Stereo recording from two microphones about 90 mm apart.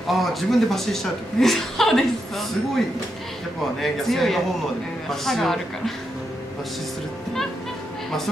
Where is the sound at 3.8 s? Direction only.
Centre (ahead or behind).